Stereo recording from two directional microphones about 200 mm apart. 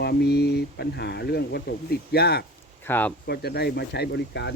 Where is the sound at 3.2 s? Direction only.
55° left (ahead or behind).